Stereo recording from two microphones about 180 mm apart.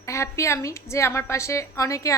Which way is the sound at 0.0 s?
15° left (ahead or behind).